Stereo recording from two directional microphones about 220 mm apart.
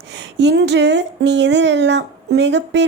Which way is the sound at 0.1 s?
50° right (ahead or behind).